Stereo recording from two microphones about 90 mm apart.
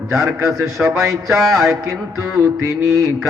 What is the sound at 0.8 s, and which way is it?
Speech, 15° right (ahead or behind).